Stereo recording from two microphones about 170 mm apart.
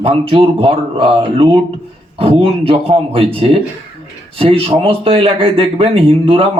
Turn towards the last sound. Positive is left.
turn(degrees=-35)  # may be behind; listen again after turning